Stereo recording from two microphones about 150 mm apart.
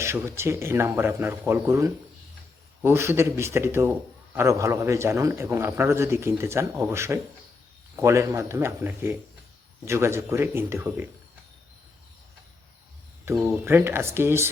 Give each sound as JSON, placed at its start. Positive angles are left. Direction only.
{"t": 0.0, "sound": "a man's voice", "side_deg": -20}
{"t": 13.3, "sound": "a man's voice", "side_deg": -15}